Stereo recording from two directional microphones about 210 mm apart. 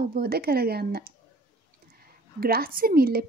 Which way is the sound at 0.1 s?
45° right (ahead or behind).